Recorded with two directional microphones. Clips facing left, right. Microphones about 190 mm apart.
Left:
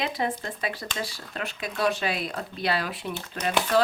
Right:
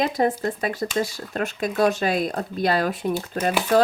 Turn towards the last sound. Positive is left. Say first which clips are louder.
# right 7 dB
turn(degrees=-45)  # may be behind; listen again after turning